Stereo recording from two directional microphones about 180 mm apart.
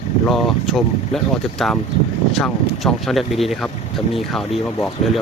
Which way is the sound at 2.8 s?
Centre (ahead or behind).